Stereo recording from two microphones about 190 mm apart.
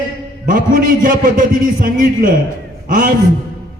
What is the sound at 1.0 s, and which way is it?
A man's voice, 45° right (ahead or behind).